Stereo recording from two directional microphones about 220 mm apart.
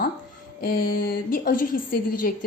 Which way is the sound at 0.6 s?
40° left (ahead or behind).